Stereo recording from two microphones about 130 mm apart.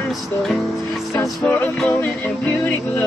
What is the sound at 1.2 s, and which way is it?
Music, 15° left (ahead or behind).